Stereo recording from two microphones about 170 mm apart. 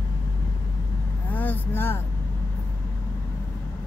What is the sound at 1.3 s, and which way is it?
Vehicle, 10° left (ahead or behind).